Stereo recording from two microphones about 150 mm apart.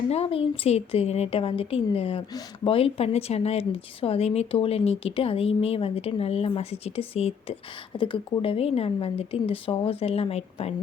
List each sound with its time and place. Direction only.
0.1 s a woman's voice: 40° left (ahead or behind)